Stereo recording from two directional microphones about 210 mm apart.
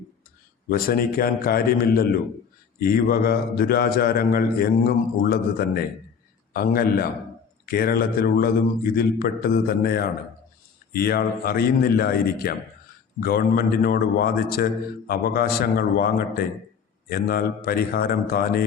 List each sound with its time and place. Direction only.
0.7 s a man's voice: 45° left (ahead or behind)